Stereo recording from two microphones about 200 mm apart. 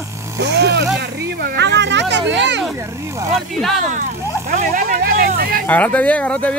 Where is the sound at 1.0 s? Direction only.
55° right (ahead or behind).